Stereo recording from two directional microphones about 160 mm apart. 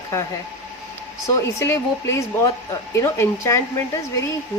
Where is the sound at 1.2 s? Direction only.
20° left (ahead or behind).